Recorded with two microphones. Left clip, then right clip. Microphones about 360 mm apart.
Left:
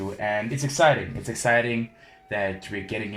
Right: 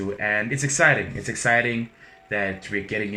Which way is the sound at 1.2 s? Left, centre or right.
Centre.